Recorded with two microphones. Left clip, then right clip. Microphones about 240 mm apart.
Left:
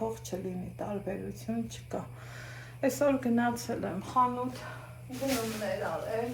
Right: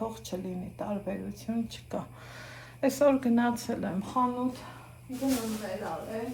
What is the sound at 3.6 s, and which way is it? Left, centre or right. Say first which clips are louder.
Speech: right 1 dB; right.